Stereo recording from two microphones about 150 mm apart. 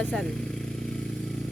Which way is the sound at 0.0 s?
Centre (ahead or behind).